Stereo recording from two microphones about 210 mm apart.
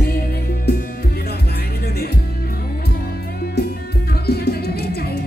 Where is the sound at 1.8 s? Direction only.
50° left (ahead or behind).